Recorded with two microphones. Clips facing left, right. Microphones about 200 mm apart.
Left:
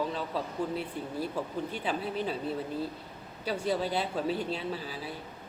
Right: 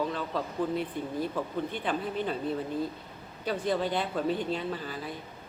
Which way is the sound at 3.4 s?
10° left (ahead or behind).